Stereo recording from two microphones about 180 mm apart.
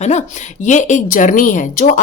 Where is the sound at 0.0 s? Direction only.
40° left (ahead or behind).